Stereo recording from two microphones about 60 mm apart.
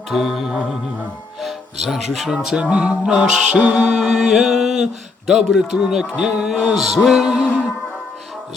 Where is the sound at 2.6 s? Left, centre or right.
Right.